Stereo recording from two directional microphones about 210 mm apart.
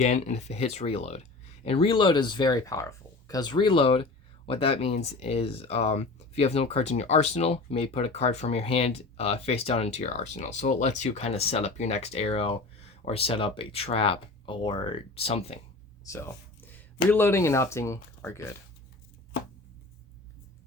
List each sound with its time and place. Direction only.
0.0 s speech: 30° left (ahead or behind)
16.0 s speech: 15° left (ahead or behind)